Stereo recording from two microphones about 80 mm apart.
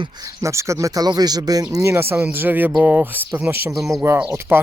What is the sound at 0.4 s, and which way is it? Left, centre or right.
Speech, right.